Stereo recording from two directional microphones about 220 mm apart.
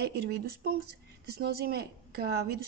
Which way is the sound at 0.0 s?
45° right (ahead or behind).